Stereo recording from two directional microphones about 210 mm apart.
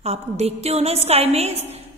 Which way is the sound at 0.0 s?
30° right (ahead or behind).